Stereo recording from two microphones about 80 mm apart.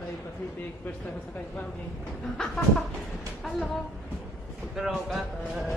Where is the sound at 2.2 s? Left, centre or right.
Centre.